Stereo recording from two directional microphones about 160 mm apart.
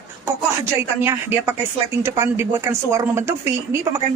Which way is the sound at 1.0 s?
15° right (ahead or behind).